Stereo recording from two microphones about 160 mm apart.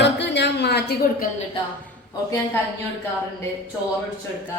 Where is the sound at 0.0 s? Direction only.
90° left.